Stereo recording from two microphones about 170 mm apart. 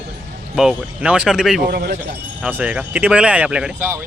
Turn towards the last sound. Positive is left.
turn(degrees=-10)  # may be behind; listen again after turning